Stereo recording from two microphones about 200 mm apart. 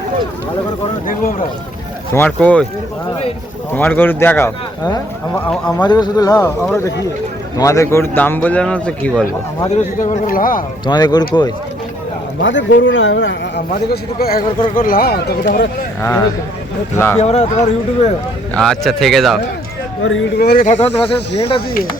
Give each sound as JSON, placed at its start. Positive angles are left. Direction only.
{"t": 2.1, "sound": "speech", "side_deg": 10}
{"t": 3.7, "sound": "speech", "side_deg": 10}
{"t": 9.6, "sound": "a man's voice", "side_deg": 35}
{"t": 10.8, "sound": "speech", "side_deg": 20}
{"t": 12.4, "sound": "a man's voice", "side_deg": 65}
{"t": 13.9, "sound": "speech", "side_deg": 50}
{"t": 16.0, "sound": "speech", "side_deg": 15}
{"t": 17.2, "sound": "a man's voice", "side_deg": 35}
{"t": 18.5, "sound": "speech", "side_deg": 0}
{"t": 20.0, "sound": "a man's voice", "side_deg": 75}
{"t": 20.4, "sound": "speech", "side_deg": 50}
{"t": 20.7, "sound": "speech", "side_deg": 30}